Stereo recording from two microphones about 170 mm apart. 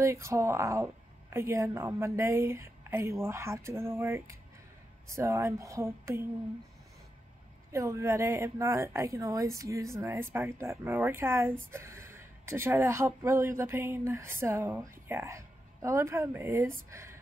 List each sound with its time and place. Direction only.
0.0 s speech: 15° right (ahead or behind)
7.7 s speech: 15° right (ahead or behind)